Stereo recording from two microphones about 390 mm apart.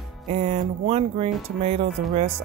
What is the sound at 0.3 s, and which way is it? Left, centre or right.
Speech, centre.